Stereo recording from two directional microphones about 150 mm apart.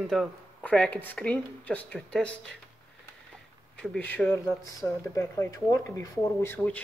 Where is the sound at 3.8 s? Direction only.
10° left (ahead or behind).